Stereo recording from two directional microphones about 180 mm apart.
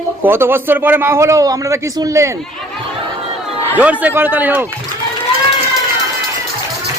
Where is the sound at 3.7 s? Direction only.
10° right (ahead or behind).